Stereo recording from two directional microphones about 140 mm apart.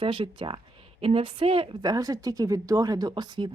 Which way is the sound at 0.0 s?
40° right (ahead or behind).